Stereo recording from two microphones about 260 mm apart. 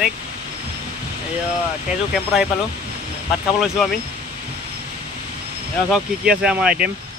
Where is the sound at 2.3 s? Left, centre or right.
Centre.